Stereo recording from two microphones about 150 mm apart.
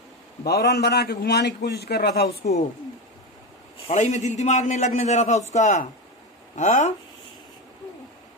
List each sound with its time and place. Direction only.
0.5 s a man's voice: 90° left
2.4 s a man's voice: 50° left (ahead or behind)
3.8 s a man's voice: 50° left (ahead or behind)